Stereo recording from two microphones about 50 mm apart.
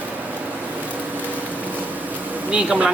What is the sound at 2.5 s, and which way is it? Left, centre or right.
Speech, right.